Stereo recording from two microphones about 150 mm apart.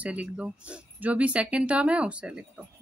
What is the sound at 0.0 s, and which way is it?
Speech, 10° right (ahead or behind).